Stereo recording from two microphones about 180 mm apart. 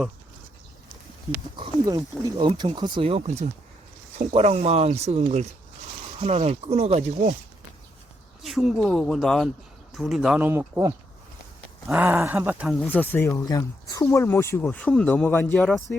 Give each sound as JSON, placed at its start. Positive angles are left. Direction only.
{"t": 1.5, "sound": "speech", "side_deg": -25}
{"t": 8.4, "sound": "speech", "side_deg": 0}
{"t": 12.9, "sound": "speech", "side_deg": 10}